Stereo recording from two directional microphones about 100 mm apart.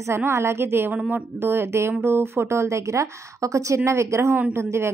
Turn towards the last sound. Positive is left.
turn(degrees=-25)  # may be behind; listen again after turning